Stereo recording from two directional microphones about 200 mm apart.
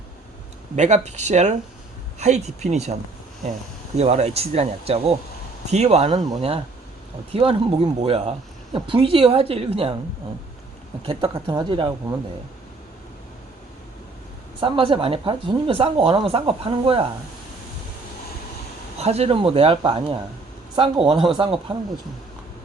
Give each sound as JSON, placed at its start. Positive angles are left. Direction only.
{"t": 0.8, "sound": "speech", "side_deg": -35}
{"t": 3.9, "sound": "speech", "side_deg": -30}
{"t": 11.0, "sound": "speech", "side_deg": -25}
{"t": 14.6, "sound": "speech", "side_deg": -25}
{"t": 18.9, "sound": "speech", "side_deg": -30}